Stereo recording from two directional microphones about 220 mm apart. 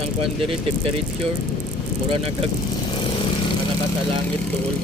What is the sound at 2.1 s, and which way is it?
Speech, 25° right (ahead or behind).